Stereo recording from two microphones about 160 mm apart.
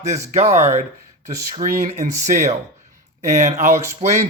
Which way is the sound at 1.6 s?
60° right (ahead or behind).